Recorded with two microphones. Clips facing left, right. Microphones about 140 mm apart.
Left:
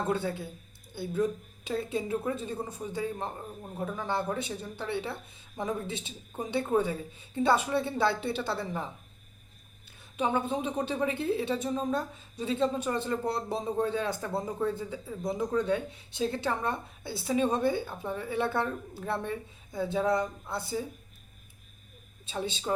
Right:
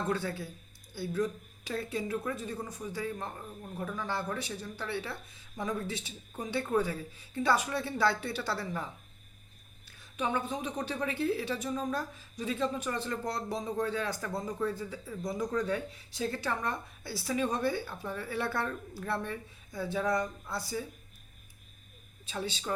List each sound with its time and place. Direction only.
0.1 s a woman's voice: 25° left (ahead or behind)
10.2 s a woman's voice: 25° left (ahead or behind)
22.3 s a woman's voice: 25° left (ahead or behind)